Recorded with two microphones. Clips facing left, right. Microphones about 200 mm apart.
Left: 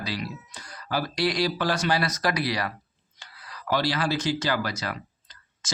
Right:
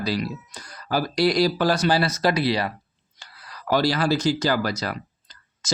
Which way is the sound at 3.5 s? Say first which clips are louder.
Right 4 dB; 40° right (ahead or behind).